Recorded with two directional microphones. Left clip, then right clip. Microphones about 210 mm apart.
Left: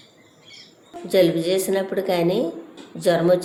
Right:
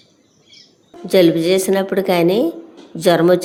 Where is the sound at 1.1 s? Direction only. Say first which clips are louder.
Right 5 dB; 45° right (ahead or behind).